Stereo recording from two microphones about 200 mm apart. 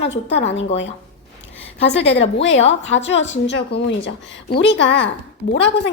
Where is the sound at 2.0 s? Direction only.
30° left (ahead or behind).